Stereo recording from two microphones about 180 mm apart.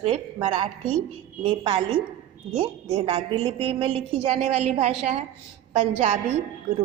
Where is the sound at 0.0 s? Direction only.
35° right (ahead or behind).